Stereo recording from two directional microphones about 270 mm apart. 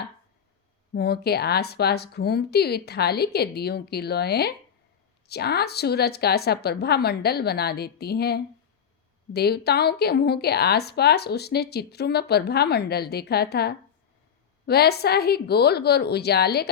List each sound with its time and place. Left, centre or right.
0.9 s a woman's voice: left